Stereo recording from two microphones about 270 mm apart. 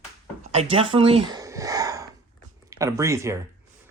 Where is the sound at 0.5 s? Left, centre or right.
Centre.